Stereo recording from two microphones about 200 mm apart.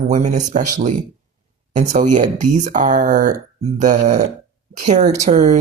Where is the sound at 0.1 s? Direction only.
35° right (ahead or behind).